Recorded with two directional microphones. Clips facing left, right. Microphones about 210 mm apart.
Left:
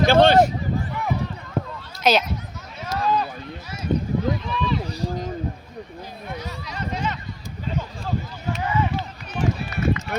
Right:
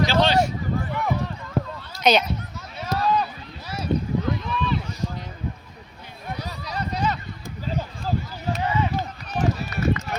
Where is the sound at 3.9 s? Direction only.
50° left (ahead or behind).